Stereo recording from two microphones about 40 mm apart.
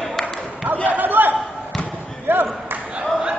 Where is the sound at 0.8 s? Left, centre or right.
Right.